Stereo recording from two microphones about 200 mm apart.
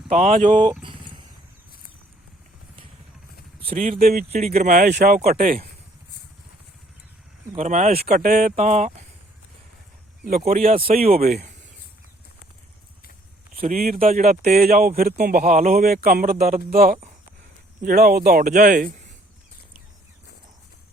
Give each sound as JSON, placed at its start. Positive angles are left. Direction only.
{"t": 0.1, "sound": "speech", "side_deg": -35}
{"t": 0.6, "sound": "speech", "side_deg": -20}
{"t": 3.7, "sound": "speech", "side_deg": -40}
{"t": 4.3, "sound": "speech", "side_deg": -30}
{"t": 4.9, "sound": "speech", "side_deg": -50}
{"t": 7.5, "sound": "speech", "side_deg": -35}
{"t": 8.0, "sound": "speech", "side_deg": -45}
{"t": 10.2, "sound": "speech", "side_deg": -45}
{"t": 10.6, "sound": "speech", "side_deg": -30}
{"t": 13.6, "sound": "speech", "side_deg": -45}
{"t": 14.0, "sound": "speech", "side_deg": -35}
{"t": 14.6, "sound": "speech", "side_deg": -45}
{"t": 15.8, "sound": "speech", "side_deg": -50}